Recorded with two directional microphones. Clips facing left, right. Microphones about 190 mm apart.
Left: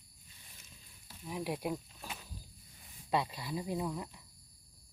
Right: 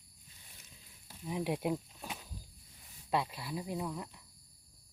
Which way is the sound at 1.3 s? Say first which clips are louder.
Right 3 dB; 20° right (ahead or behind).